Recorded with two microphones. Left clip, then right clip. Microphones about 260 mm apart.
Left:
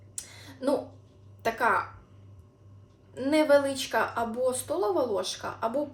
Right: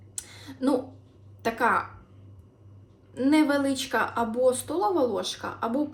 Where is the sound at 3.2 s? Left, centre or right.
Centre.